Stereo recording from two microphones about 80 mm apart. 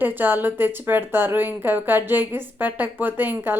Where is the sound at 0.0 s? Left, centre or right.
Right.